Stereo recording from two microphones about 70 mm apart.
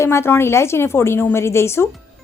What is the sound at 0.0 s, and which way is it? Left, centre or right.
Speech, left.